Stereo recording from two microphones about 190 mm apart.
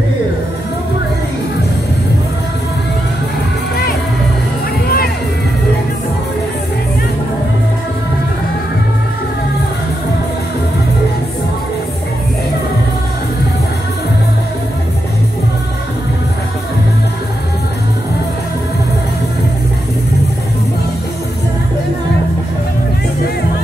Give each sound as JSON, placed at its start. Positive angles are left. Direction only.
{"t": 4.8, "sound": "music", "side_deg": 55}